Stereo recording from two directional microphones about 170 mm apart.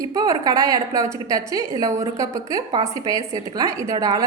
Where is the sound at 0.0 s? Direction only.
20° right (ahead or behind).